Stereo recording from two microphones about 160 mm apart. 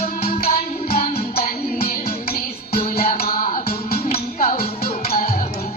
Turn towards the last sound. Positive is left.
turn(degrees=70)  # may be behind; listen again after turning